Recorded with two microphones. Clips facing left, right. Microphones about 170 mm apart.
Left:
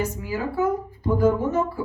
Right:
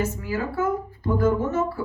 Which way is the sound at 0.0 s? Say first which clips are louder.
Even; 15° left (ahead or behind).